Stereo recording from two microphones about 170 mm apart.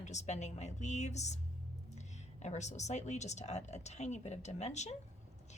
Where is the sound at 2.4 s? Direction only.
45° left (ahead or behind).